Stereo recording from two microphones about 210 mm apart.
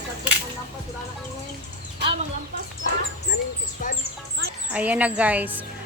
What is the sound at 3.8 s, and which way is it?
Speech, 40° left (ahead or behind).